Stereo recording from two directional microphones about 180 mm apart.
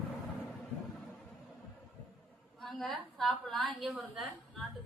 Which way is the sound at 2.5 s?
Centre (ahead or behind).